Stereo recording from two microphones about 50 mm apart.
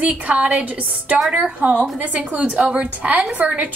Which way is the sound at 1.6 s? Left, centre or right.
Right.